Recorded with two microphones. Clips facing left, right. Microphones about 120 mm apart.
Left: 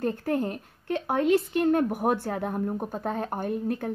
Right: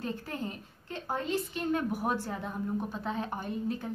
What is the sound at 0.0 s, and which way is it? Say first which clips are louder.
A woman's voice: left 9 dB; 55° left (ahead or behind).